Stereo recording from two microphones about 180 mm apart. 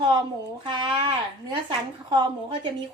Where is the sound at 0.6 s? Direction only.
25° right (ahead or behind).